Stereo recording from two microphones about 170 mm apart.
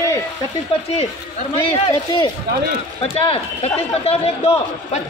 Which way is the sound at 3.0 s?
35° left (ahead or behind).